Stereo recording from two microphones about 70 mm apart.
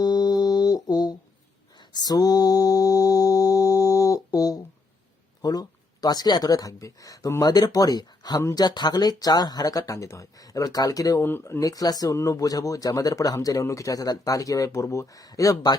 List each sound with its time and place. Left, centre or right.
0.0 s music: left
1.9 s mantra: left
5.4 s speech: left
7.4 s speech: left
8.5 s speech: left
11.2 s speech: left
11.6 s speech: left
12.1 s speech: left